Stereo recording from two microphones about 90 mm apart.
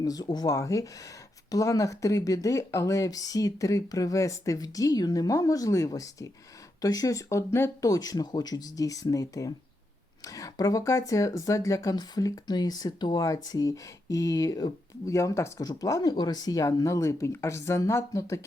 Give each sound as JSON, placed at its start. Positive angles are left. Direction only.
{"t": 0.0, "sound": "speech", "side_deg": 45}